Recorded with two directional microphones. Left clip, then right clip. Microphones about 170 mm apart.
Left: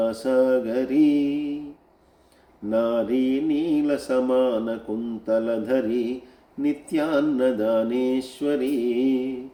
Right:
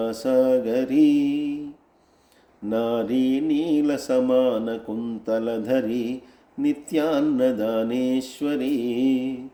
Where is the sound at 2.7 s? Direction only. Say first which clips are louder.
Left 2 dB; 45° right (ahead or behind).